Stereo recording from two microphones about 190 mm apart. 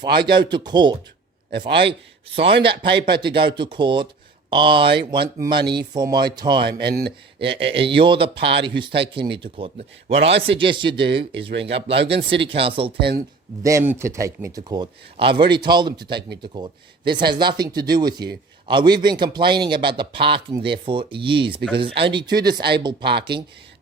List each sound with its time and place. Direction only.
0.0 s speech: 25° right (ahead or behind)
6.7 s speech: 55° right (ahead or behind)
7.7 s speech: 30° right (ahead or behind)
10.3 s speech: 65° right (ahead or behind)
10.6 s speech: 25° right (ahead or behind)
13.0 s speech: 55° right (ahead or behind)
13.6 s speech: 15° right (ahead or behind)